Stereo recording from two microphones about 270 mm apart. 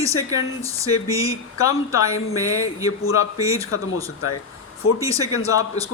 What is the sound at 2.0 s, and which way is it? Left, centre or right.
A man's voice, left.